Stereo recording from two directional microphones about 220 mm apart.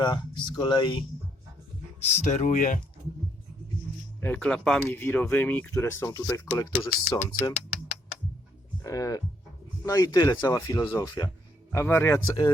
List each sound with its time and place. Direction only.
0.0 s speech: 20° left (ahead or behind); by 2.8 s 35° left (ahead or behind)
4.2 s speech: 5° left (ahead or behind)
8.8 s speech: 15° left (ahead or behind)